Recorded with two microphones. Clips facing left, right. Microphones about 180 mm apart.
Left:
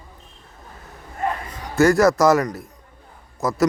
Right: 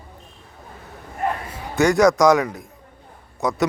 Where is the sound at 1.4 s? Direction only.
10° right (ahead or behind).